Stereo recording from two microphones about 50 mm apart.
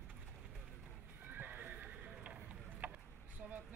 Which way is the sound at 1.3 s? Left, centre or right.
Right.